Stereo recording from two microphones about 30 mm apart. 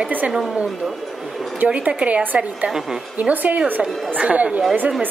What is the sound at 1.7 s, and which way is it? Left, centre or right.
A woman's voice, right.